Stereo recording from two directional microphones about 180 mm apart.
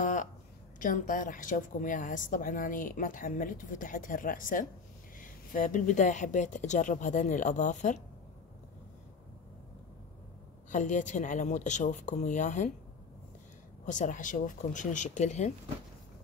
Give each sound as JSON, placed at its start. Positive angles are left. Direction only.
{"t": 0.0, "sound": "a sound", "side_deg": 45}
{"t": 0.7, "sound": "a woman's voice", "side_deg": 45}
{"t": 10.7, "sound": "a woman's voice", "side_deg": 45}
{"t": 13.8, "sound": "a woman's voice", "side_deg": 45}